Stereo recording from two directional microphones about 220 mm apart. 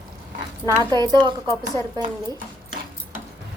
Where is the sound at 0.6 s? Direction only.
20° right (ahead or behind).